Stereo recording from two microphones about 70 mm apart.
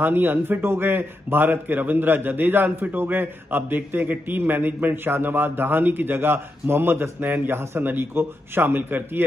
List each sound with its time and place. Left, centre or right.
0.0 s a man's voice: right